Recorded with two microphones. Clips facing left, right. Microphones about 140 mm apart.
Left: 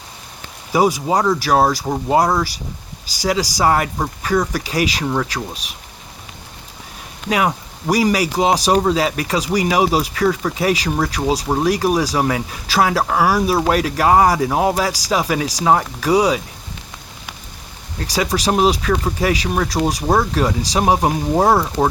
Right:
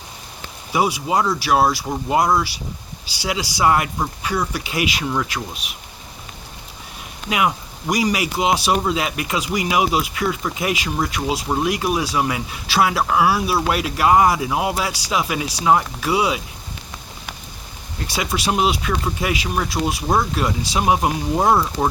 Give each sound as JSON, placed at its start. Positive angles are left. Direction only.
{"t": 0.7, "sound": "speech", "side_deg": 40}
{"t": 7.3, "sound": "speech", "side_deg": 40}
{"t": 18.0, "sound": "speech", "side_deg": 40}